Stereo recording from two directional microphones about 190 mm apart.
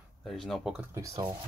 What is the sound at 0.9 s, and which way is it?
Speech, 15° right (ahead or behind).